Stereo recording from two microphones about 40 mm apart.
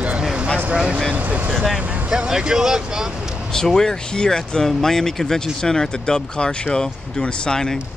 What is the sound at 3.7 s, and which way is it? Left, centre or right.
Speech, centre.